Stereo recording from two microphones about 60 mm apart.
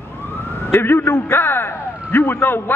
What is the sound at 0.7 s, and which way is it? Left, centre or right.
A man's voice, left.